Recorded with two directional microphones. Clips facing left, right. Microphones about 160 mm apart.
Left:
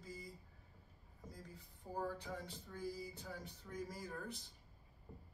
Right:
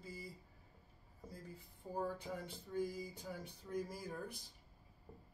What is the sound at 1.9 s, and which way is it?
Speech, 15° right (ahead or behind).